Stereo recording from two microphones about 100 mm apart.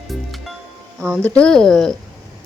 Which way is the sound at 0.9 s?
10° right (ahead or behind).